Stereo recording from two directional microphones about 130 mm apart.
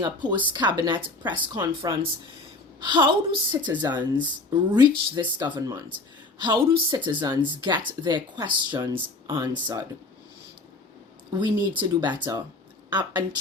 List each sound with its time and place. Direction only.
0.0 s speech: 35° right (ahead or behind)
6.4 s speech: 40° right (ahead or behind)
11.3 s speech: 35° right (ahead or behind)